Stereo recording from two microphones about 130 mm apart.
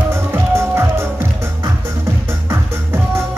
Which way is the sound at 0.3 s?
20° right (ahead or behind).